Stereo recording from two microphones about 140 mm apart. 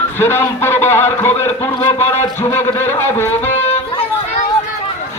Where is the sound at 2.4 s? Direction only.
15° left (ahead or behind).